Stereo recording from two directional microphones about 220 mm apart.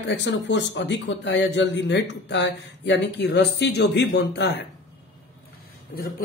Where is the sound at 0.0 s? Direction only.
55° left (ahead or behind).